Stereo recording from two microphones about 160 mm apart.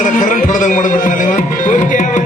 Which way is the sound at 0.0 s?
55° left (ahead or behind).